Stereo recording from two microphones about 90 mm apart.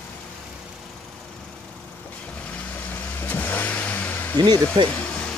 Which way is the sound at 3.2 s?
20° left (ahead or behind).